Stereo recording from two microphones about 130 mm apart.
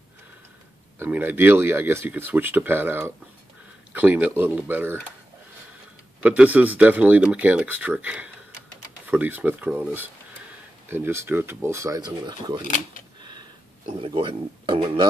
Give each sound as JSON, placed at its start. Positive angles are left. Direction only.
{"t": 0.9, "sound": "speech", "side_deg": -15}
{"t": 6.2, "sound": "speech", "side_deg": -10}
{"t": 12.6, "sound": "speech", "side_deg": 80}
{"t": 13.2, "sound": "a sound", "side_deg": -35}
{"t": 14.0, "sound": "speech", "side_deg": -40}